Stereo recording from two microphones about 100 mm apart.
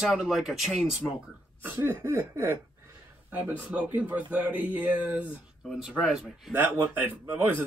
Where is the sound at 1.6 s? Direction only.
20° right (ahead or behind).